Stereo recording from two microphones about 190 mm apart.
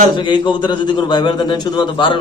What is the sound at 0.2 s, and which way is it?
A man's voice, 25° left (ahead or behind).